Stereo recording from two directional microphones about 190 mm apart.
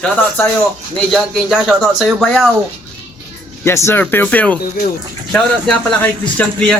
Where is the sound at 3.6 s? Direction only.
15° left (ahead or behind).